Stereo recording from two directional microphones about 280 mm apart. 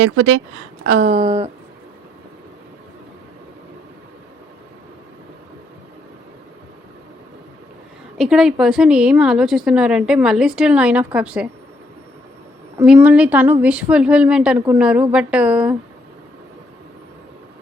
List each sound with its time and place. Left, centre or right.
0.0 s speech: right
0.9 s a sound: right
8.2 s a woman's voice: centre
12.8 s a woman's voice: centre